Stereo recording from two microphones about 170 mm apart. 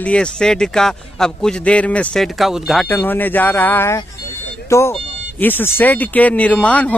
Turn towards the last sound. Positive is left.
turn(degrees=10)  # may be behind; listen again after turning